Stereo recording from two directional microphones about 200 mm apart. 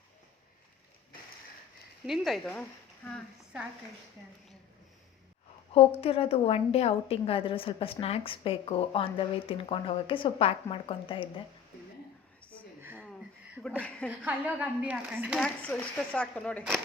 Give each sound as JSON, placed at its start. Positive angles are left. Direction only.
{"t": 2.0, "sound": "a woman's voice", "side_deg": 0}
{"t": 5.7, "sound": "a woman's voice", "side_deg": 30}
{"t": 13.0, "sound": "a sound", "side_deg": 0}
{"t": 13.8, "sound": "a woman's voice", "side_deg": 5}
{"t": 14.1, "sound": "a woman's voice", "side_deg": -5}